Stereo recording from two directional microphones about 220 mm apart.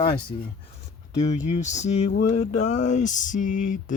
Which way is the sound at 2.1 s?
50° left (ahead or behind).